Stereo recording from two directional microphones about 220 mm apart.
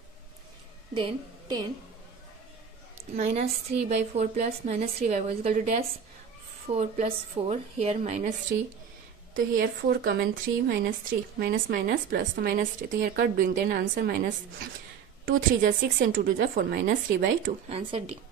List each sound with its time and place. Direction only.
0.9 s a woman's voice: 20° right (ahead or behind)
4.1 s a woman's voice: 30° right (ahead or behind)
9.3 s speech: 40° right (ahead or behind)